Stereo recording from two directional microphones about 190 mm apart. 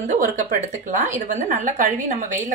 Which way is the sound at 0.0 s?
45° right (ahead or behind).